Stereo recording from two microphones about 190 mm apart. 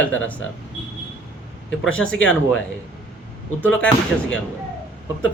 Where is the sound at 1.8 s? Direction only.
90° left.